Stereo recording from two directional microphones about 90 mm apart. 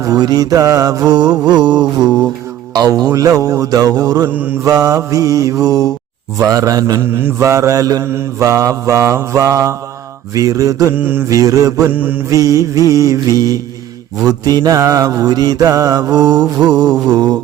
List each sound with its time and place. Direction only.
0.0 s mantra: 45° right (ahead or behind)
4.3 s mantra: 20° right (ahead or behind)
4.6 s mantra: 40° right (ahead or behind)
7.0 s mantra: 25° right (ahead or behind)
10.9 s mantra: 25° right (ahead or behind)
11.3 s mantra: 40° right (ahead or behind)
11.9 s mantra: 20° right (ahead or behind)
12.3 s mantra: 40° right (ahead or behind)